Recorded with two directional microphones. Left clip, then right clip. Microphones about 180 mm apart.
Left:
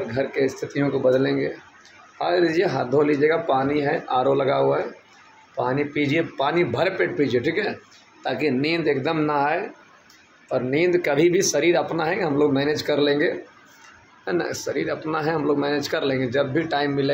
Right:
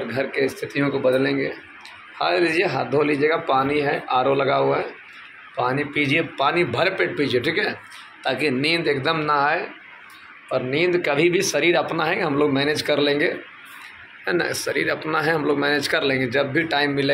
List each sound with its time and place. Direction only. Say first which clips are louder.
0.1 s speech: right 1 dB; 15° left (ahead or behind)